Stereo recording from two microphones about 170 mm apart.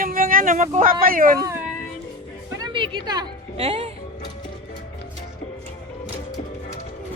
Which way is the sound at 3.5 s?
35° right (ahead or behind).